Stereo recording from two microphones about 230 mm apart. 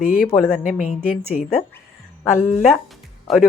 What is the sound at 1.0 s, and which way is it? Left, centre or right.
Speech, left.